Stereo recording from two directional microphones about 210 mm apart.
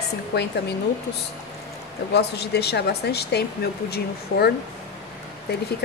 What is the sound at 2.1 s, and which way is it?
Speech, 50° left (ahead or behind).